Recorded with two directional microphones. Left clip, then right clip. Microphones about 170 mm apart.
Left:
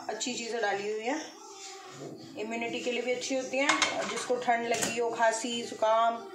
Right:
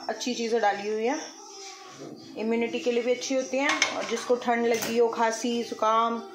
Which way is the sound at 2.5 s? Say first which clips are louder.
Right 7 dB; 40° right (ahead or behind).